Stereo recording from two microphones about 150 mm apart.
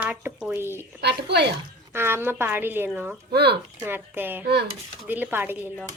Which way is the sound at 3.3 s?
90° right.